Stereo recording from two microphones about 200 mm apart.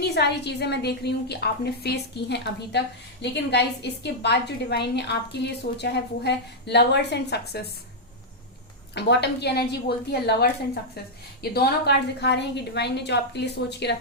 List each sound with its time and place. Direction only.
0.0 s a woman's voice: 55° left (ahead or behind)
9.0 s a woman's voice: 55° left (ahead or behind)
11.5 s a woman's voice: 55° left (ahead or behind)